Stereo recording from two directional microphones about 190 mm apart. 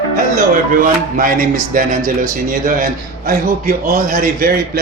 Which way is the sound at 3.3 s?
50° right (ahead or behind).